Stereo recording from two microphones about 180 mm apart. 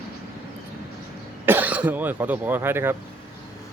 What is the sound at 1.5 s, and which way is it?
Speech, 10° right (ahead or behind).